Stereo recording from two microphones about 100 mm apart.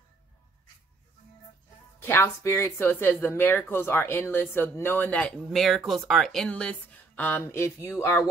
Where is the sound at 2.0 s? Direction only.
25° left (ahead or behind).